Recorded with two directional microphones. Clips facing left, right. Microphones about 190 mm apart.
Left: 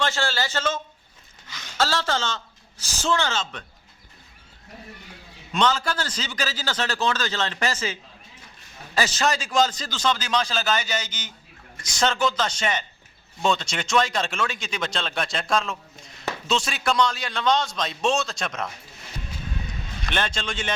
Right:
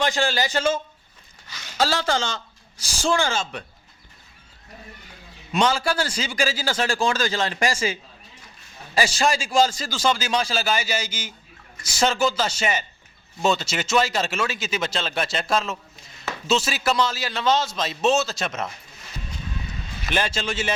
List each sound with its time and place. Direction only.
0.0 s a man's voice: 15° right (ahead or behind)
1.8 s a man's voice: 15° right (ahead or behind)
5.5 s a man's voice: 10° right (ahead or behind)
9.0 s a man's voice: 10° right (ahead or behind)
20.1 s a man's voice: 5° right (ahead or behind)